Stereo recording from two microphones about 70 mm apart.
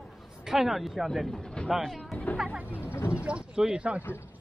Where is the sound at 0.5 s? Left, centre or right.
Centre.